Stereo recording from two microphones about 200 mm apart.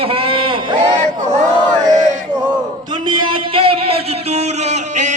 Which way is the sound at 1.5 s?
20° right (ahead or behind).